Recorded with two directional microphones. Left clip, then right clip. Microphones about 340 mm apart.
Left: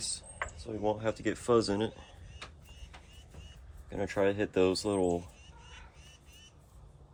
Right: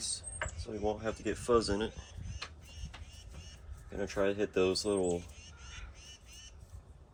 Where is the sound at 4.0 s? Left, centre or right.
Left.